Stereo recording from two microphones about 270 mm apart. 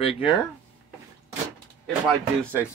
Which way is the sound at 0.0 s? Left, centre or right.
Centre.